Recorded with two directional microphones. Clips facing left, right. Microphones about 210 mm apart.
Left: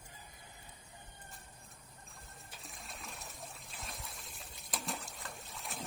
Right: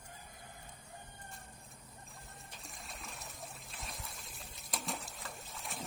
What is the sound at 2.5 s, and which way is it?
Trickle, centre (ahead or behind).